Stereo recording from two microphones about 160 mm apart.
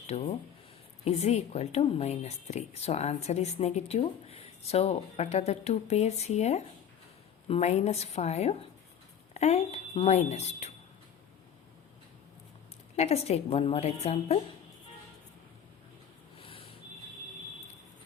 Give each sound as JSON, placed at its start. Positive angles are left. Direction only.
{"t": 0.1, "sound": "a woman's voice", "side_deg": 45}
{"t": 13.0, "sound": "a woman's voice", "side_deg": 40}
{"t": 16.4, "sound": "a sound", "side_deg": 35}